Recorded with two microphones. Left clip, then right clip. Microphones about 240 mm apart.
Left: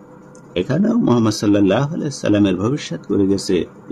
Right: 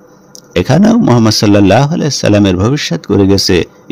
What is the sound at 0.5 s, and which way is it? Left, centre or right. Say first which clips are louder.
Speech: right 9 dB; right.